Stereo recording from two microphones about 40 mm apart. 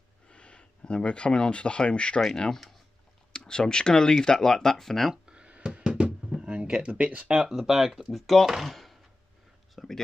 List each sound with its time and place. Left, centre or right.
0.3 s speech: left
3.3 s speech: centre
5.1 s a sound: right
6.5 s speech: right
7.2 s speech: centre
8.1 s speech: centre
9.8 s a sound: centre